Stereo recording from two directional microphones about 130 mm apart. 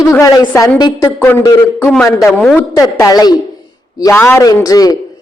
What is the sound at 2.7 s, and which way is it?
Speech, 25° left (ahead or behind).